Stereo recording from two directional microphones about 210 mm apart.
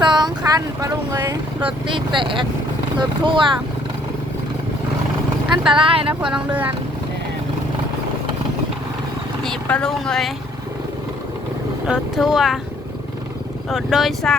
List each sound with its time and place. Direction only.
0.0 s speech: 20° right (ahead or behind)
5.7 s speech: 25° right (ahead or behind)
6.2 s speech: 5° right (ahead or behind)
9.4 s speech: 5° left (ahead or behind)
11.9 s speech: centre (ahead or behind)
13.7 s speech: centre (ahead or behind)